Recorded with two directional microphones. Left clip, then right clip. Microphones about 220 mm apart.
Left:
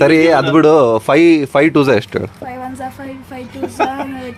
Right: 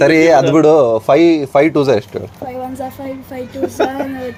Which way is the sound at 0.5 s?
20° left (ahead or behind).